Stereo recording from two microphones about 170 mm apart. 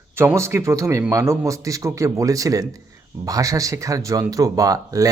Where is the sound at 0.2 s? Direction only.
15° right (ahead or behind).